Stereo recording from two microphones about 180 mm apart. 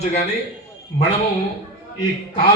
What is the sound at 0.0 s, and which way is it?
Speech, 35° left (ahead or behind).